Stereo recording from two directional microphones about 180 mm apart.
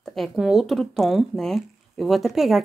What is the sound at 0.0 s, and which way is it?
Speech, centre (ahead or behind).